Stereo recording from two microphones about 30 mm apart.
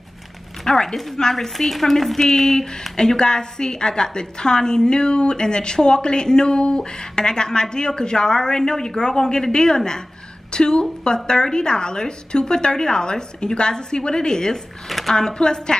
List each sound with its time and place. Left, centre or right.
0.7 s speech: centre
1.7 s speech: centre
2.1 s a woman's voice: centre
14.9 s a sound: centre
15.1 s a woman's voice: left